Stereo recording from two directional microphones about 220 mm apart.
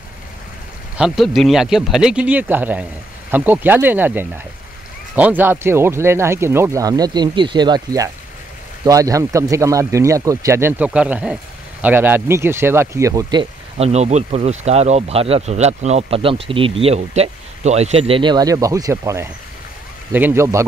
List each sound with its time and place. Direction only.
0.9 s speech: centre (ahead or behind)